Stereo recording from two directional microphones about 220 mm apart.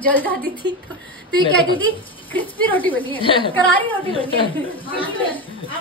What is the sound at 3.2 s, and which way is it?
A woman's voice, 25° left (ahead or behind).